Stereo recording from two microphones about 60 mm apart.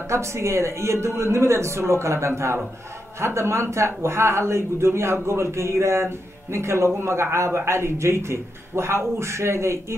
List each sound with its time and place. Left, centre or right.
0.1 s a man's voice: right